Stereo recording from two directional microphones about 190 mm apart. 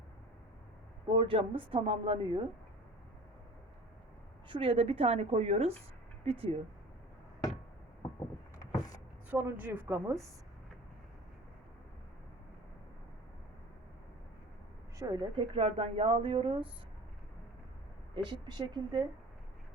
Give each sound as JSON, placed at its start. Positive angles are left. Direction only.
{"t": 1.0, "sound": "speech", "side_deg": -25}
{"t": 4.4, "sound": "a woman's voice", "side_deg": -25}
{"t": 8.5, "sound": "vehicle", "side_deg": 20}
{"t": 9.3, "sound": "a woman's voice", "side_deg": -10}
{"t": 14.9, "sound": "speech", "side_deg": -20}
{"t": 18.1, "sound": "speech", "side_deg": -25}